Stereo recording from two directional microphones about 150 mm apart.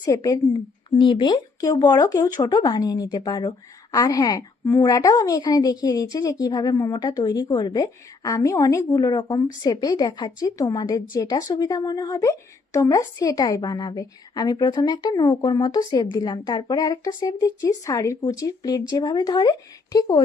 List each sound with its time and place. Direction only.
0.0 s a woman's voice: 25° left (ahead or behind)
0.9 s a woman's voice: 35° left (ahead or behind)